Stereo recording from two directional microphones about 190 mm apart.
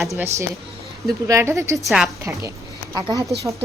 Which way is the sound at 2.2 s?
15° right (ahead or behind).